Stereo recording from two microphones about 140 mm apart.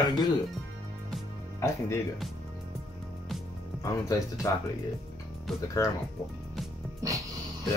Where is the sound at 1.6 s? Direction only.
20° left (ahead or behind).